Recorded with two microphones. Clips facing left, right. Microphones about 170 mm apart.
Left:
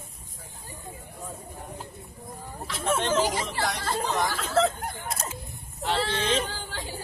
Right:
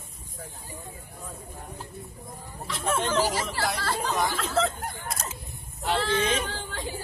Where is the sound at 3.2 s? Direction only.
20° left (ahead or behind).